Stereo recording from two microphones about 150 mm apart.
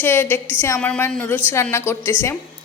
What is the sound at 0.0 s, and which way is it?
A woman's voice, 15° left (ahead or behind).